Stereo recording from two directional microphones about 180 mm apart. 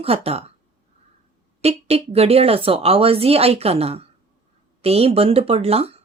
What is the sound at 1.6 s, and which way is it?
Speech, 35° right (ahead or behind).